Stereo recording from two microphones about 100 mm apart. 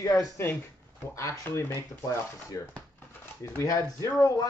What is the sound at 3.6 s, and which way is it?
Speech, 35° left (ahead or behind).